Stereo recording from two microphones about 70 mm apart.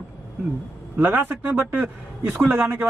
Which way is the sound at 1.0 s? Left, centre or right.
Right.